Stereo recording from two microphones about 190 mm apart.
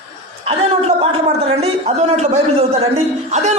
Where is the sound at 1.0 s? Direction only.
30° right (ahead or behind).